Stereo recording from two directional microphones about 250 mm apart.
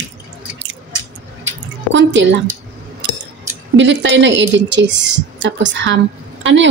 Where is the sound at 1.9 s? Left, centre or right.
Right.